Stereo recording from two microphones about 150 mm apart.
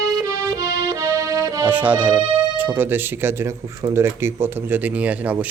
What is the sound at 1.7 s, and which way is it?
Accordion, 10° right (ahead or behind).